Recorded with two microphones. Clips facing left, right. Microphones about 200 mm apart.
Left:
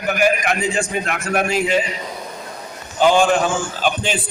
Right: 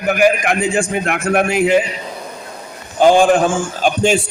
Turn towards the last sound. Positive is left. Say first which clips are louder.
# right 6 dB
turn(degrees=-45)  # may be behind; listen again after turning